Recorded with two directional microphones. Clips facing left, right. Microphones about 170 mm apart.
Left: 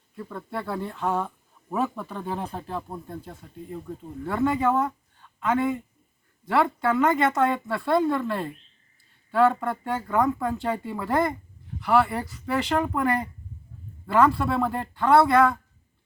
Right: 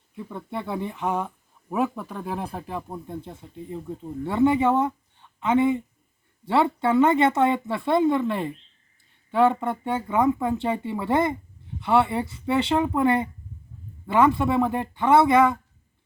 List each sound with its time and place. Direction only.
0.2 s speech: 15° right (ahead or behind)
3.2 s speech: 25° right (ahead or behind)